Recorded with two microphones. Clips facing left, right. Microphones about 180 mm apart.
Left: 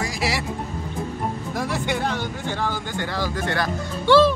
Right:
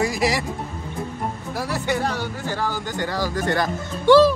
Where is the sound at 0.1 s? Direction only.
45° right (ahead or behind).